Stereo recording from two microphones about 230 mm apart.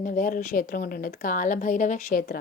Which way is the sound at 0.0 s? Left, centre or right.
Left.